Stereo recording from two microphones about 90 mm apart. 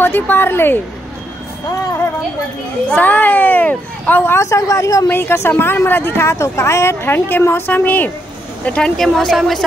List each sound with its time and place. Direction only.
0.0 s speech: 25° left (ahead or behind)
2.9 s speech: 20° left (ahead or behind)
4.5 s speech: 35° left (ahead or behind)
5.1 s a woman's voice: 25° left (ahead or behind); by 9.6 s 5° left (ahead or behind)